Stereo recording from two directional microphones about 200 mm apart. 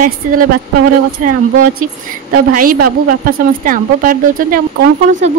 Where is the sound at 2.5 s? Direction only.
45° right (ahead or behind).